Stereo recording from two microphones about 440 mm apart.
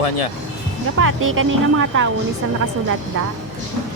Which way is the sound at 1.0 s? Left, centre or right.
Right.